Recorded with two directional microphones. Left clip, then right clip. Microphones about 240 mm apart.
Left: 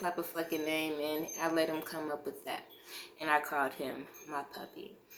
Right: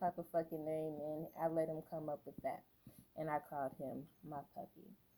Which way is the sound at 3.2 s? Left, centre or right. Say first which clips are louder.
Left 10 dB; right.